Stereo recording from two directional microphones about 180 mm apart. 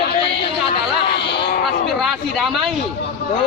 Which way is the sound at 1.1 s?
70° left (ahead or behind).